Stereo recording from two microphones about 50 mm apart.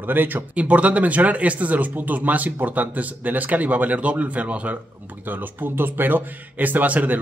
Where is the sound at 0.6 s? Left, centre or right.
Right.